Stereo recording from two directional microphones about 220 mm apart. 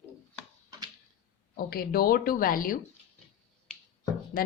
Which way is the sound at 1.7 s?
40° left (ahead or behind).